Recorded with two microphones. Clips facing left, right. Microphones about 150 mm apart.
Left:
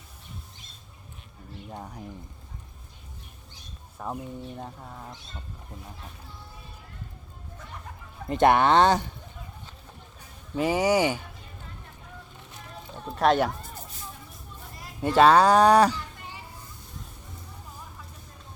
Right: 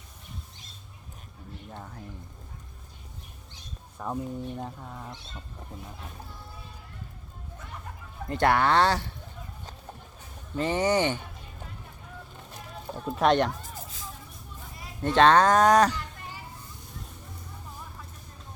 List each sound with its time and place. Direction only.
1.7 s speech: 15° left (ahead or behind)
3.9 s speech: 5° left (ahead or behind)
8.3 s speech: 20° left (ahead or behind)
10.5 s speech: 10° left (ahead or behind)
13.1 s speech: centre (ahead or behind)
15.0 s speech: 5° left (ahead or behind)